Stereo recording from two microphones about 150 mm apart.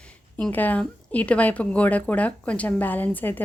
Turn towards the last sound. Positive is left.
turn(degrees=10)  # may be behind; listen again after turning